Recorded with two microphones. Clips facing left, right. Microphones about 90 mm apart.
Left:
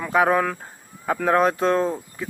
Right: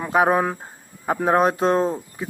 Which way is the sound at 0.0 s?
20° right (ahead or behind).